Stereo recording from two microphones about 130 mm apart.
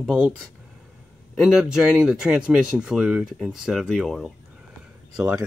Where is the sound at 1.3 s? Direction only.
5° right (ahead or behind).